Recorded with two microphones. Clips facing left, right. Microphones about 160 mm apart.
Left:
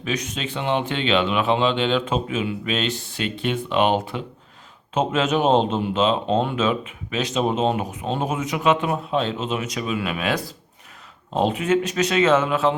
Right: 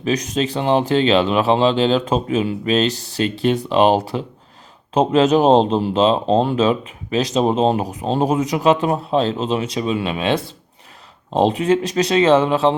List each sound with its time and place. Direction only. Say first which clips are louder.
0.0 s speech: right 7 dB; 40° right (ahead or behind)